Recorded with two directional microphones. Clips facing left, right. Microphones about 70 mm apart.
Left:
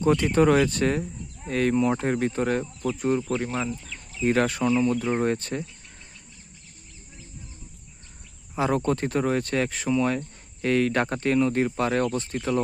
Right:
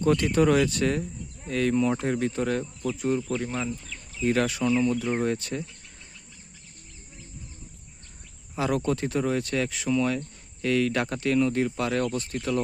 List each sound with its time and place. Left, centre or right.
0.0 s speech: left
0.3 s speech: left
1.7 s speech: left
2.0 s speech: left
3.9 s chicken: left
4.6 s speech: left
8.5 s speech: left